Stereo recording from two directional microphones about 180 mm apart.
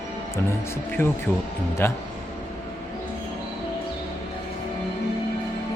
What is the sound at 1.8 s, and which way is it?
Speech, 15° left (ahead or behind).